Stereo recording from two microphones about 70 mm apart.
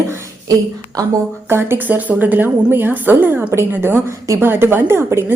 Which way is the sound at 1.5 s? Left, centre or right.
Right.